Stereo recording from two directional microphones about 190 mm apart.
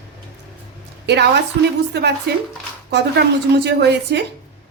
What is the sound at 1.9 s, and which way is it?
Speech, 60° right (ahead or behind).